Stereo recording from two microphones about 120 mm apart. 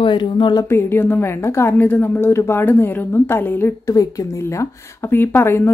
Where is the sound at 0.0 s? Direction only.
40° left (ahead or behind).